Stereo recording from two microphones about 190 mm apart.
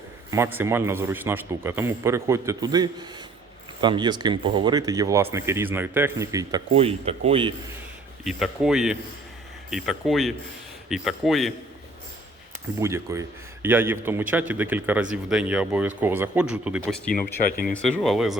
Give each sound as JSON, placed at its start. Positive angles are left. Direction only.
{"t": 0.3, "sound": "a man's voice", "side_deg": -15}
{"t": 6.7, "sound": "speech", "side_deg": -35}
{"t": 8.2, "sound": "speech", "side_deg": 0}
{"t": 12.8, "sound": "a man's voice", "side_deg": -15}
{"t": 17.4, "sound": "speech", "side_deg": 45}
{"t": 18.0, "sound": "speech", "side_deg": 0}